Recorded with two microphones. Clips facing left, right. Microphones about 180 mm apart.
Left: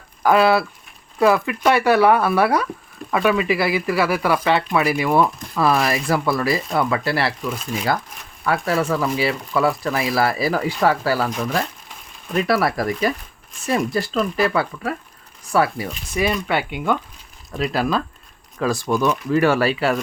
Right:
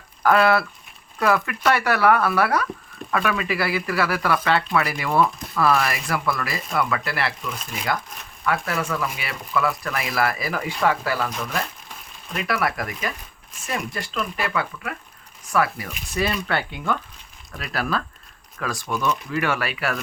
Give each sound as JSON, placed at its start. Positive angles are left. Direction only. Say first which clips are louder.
{"t": 0.2, "sound": "speech", "louder": "left 2 dB", "side_deg": 15}
{"t": 8.4, "sound": "speech", "louder": "left 5 dB", "side_deg": 30}
{"t": 16.1, "sound": "speech", "louder": "left 3 dB", "side_deg": 15}
{"t": 18.6, "sound": "speech", "louder": "left 6 dB", "side_deg": 30}